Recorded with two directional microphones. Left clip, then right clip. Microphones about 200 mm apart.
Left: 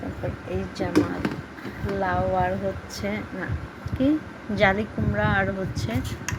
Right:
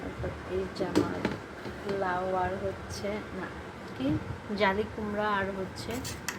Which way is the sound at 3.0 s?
30° left (ahead or behind).